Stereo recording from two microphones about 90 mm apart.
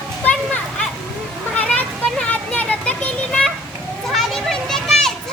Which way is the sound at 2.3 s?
15° left (ahead or behind).